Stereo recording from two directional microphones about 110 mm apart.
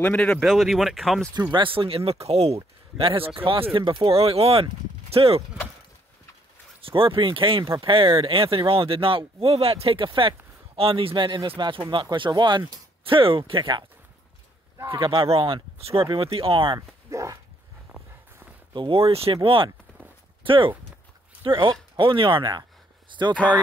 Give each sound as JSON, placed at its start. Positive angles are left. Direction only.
{"t": 0.0, "sound": "speech", "side_deg": 10}
{"t": 1.3, "sound": "speech", "side_deg": -40}
{"t": 6.8, "sound": "speech", "side_deg": -55}
{"t": 14.9, "sound": "speech", "side_deg": -55}
{"t": 17.1, "sound": "dog", "side_deg": -30}
{"t": 18.7, "sound": "speech", "side_deg": -50}
{"t": 23.3, "sound": "speech", "side_deg": 15}